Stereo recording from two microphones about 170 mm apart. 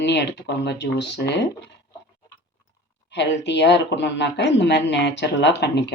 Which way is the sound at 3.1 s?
90° left.